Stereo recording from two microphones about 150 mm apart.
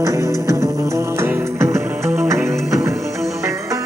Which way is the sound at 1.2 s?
15° right (ahead or behind).